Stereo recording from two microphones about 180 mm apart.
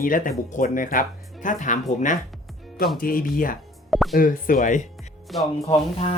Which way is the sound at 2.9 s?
50° left (ahead or behind).